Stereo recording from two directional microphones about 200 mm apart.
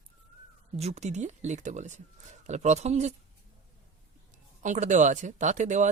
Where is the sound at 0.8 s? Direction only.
35° right (ahead or behind).